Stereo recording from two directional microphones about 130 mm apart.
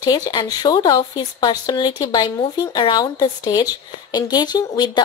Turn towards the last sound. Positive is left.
turn(degrees=30)  # may be behind; listen again after turning